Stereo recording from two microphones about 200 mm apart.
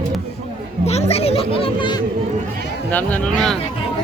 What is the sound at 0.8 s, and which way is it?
Children playing, 30° left (ahead or behind).